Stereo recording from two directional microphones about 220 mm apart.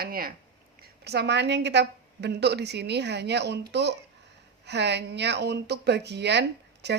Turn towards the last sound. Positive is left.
turn(degrees=-50)  # may be behind; listen again after turning